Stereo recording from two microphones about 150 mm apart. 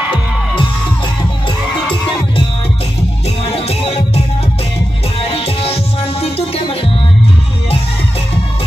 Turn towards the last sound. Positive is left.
turn(degrees=40)  # may be behind; listen again after turning